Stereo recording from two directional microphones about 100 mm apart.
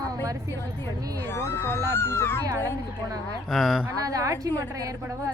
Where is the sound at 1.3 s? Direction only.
25° left (ahead or behind).